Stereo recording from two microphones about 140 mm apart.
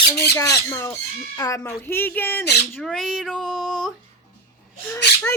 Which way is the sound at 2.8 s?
Centre (ahead or behind).